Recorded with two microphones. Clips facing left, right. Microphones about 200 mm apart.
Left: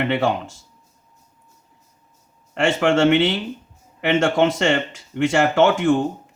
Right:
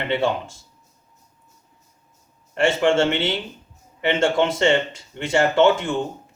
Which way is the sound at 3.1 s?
75° left (ahead or behind).